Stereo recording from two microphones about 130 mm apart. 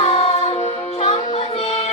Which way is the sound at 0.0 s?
55° left (ahead or behind).